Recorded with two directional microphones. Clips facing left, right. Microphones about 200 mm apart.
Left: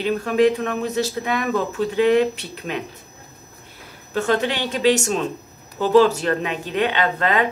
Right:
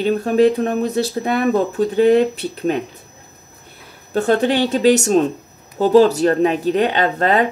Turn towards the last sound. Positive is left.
turn(degrees=-35)  # may be behind; listen again after turning